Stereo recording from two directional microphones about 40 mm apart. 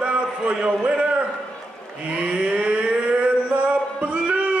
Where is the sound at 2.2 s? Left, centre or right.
Right.